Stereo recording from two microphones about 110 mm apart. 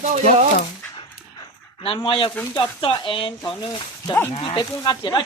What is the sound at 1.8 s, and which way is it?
Speech, 55° left (ahead or behind).